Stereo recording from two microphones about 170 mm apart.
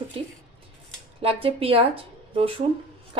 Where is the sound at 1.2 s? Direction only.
35° right (ahead or behind).